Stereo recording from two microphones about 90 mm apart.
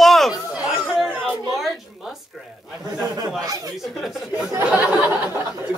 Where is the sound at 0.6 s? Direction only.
5° right (ahead or behind).